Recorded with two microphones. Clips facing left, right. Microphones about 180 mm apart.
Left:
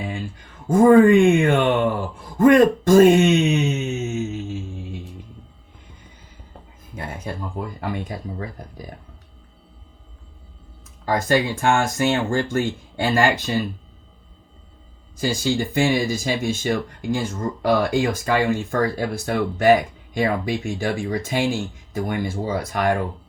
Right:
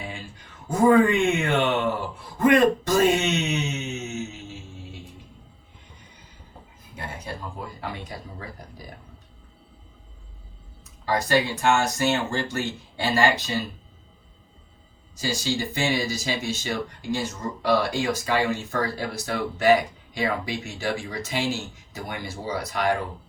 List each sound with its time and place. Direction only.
0.7 s speech: 50° left (ahead or behind)
7.8 s speech: 50° left (ahead or behind)
11.0 s speech: 50° left (ahead or behind)
15.1 s speech: 55° left (ahead or behind)